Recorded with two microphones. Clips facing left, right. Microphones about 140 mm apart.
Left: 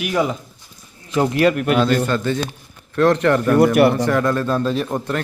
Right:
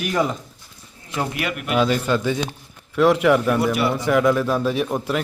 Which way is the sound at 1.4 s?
40° left (ahead or behind).